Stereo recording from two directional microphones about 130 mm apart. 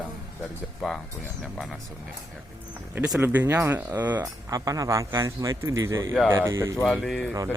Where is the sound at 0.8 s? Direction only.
5° left (ahead or behind).